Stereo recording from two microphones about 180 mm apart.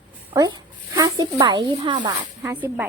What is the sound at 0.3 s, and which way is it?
Speech, 20° right (ahead or behind).